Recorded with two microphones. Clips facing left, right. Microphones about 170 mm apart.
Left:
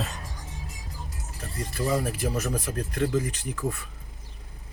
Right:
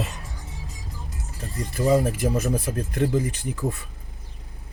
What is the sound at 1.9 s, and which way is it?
Speech, 20° right (ahead or behind).